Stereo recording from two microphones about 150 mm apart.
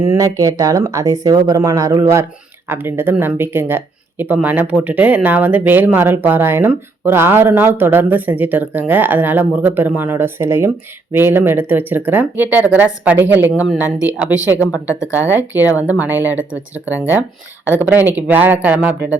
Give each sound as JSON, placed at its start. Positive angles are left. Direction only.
{"t": 0.0, "sound": "speech", "side_deg": -20}